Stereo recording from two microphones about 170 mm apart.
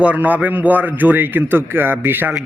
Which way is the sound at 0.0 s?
10° right (ahead or behind).